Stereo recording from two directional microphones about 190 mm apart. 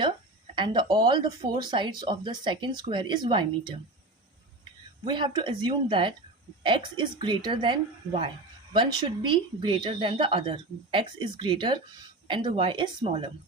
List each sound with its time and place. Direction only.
0.5 s speech: 25° right (ahead or behind)
5.0 s speech: 25° right (ahead or behind)